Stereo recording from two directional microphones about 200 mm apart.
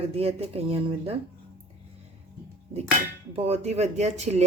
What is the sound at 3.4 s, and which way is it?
Speech, 30° right (ahead or behind).